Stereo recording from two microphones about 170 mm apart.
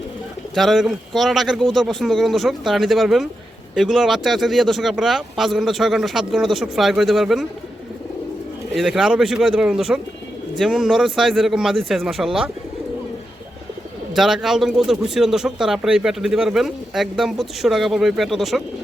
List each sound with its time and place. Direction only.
0.5 s speech: centre (ahead or behind)
8.7 s speech: centre (ahead or behind)
14.2 s speech: centre (ahead or behind)